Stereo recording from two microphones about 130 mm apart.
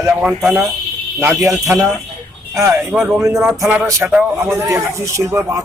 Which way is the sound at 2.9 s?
Centre (ahead or behind).